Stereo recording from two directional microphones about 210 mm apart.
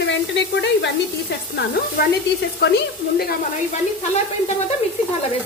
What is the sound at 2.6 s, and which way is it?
A woman's voice, 50° left (ahead or behind).